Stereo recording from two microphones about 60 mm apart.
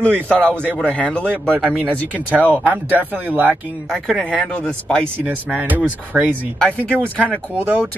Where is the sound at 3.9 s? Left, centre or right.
Centre.